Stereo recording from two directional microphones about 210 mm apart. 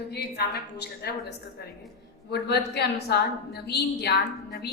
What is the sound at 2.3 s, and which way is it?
A woman's voice, 50° left (ahead or behind).